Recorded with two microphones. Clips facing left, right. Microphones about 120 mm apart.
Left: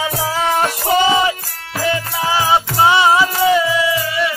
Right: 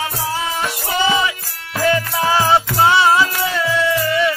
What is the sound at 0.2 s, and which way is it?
Music, 75° left (ahead or behind).